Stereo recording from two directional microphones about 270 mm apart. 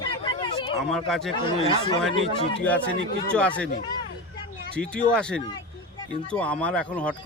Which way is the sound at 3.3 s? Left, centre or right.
Centre.